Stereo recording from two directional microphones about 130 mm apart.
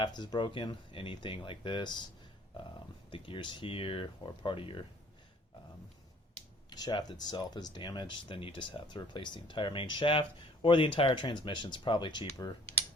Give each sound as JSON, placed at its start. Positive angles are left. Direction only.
{"t": 0.0, "sound": "speech", "side_deg": 35}
{"t": 3.1, "sound": "speech", "side_deg": 40}
{"t": 6.7, "sound": "speech", "side_deg": 30}